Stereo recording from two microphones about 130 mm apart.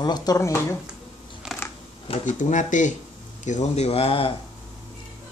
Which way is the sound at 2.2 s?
75° left (ahead or behind).